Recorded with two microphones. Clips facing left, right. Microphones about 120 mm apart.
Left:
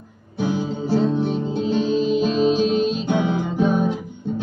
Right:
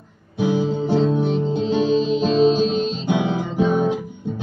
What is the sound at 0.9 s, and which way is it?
Music, 5° left (ahead or behind).